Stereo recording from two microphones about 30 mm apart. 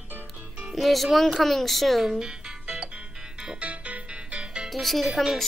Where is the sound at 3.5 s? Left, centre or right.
Right.